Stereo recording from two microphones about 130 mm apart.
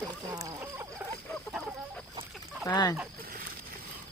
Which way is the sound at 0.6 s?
15° right (ahead or behind).